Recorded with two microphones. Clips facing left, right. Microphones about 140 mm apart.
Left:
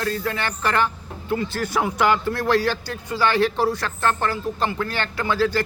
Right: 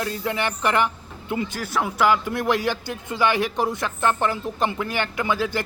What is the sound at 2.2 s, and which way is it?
A man's voice, 20° right (ahead or behind).